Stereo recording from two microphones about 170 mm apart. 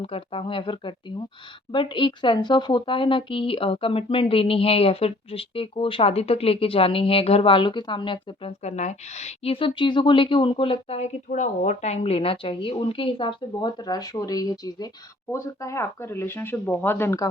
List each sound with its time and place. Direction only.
0.0 s a woman's voice: 30° left (ahead or behind); by 17.2 s 15° left (ahead or behind)